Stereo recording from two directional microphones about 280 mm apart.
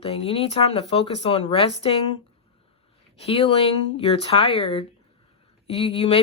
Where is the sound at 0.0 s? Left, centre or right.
Left.